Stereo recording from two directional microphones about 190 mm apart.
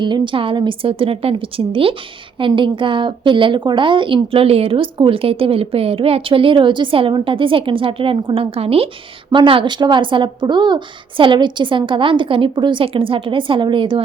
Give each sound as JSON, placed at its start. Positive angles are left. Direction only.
{"t": 0.0, "sound": "a woman's voice", "side_deg": -25}